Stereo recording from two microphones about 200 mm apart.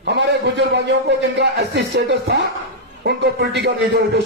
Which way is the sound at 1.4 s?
55° right (ahead or behind).